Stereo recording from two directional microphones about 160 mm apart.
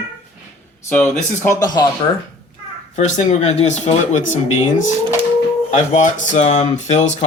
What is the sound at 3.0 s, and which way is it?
Speech, 45° left (ahead or behind).